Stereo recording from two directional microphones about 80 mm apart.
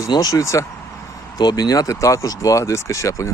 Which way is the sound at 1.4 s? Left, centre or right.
Left.